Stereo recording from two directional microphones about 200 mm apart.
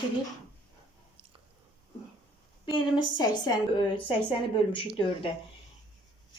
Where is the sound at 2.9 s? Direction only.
20° left (ahead or behind).